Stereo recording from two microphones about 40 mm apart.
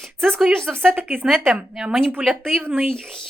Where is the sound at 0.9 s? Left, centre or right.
Right.